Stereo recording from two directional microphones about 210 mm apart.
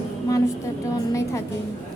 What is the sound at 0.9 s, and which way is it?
Speech, 15° left (ahead or behind).